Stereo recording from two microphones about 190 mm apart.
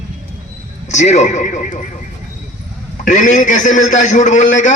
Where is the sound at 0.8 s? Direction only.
35° left (ahead or behind).